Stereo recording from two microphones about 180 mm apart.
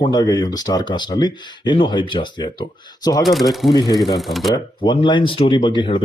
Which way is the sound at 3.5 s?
Centre (ahead or behind).